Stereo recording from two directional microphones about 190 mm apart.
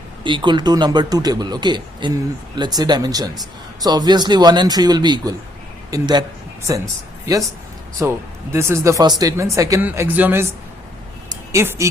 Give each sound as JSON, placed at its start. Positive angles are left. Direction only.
{"t": 0.2, "sound": "speech", "side_deg": -25}
{"t": 8.0, "sound": "speech", "side_deg": -15}
{"t": 11.5, "sound": "speech", "side_deg": -15}